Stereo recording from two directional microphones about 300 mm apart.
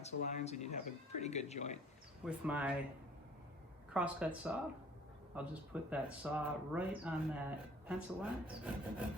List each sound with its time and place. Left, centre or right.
0.0 s speech: left
2.2 s speech: centre
3.9 s speech: centre